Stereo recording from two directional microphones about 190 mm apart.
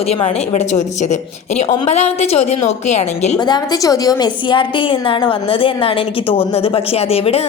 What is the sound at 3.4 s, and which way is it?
A woman's voice, 20° left (ahead or behind).